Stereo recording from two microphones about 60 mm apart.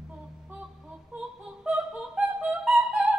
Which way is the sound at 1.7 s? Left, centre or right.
Centre.